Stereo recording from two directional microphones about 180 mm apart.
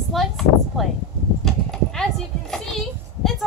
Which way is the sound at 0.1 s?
Centre (ahead or behind).